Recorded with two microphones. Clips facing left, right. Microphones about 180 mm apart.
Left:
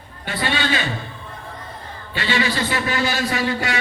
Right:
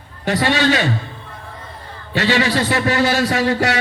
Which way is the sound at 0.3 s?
85° right.